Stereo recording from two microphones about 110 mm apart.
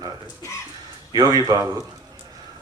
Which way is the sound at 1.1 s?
35° right (ahead or behind).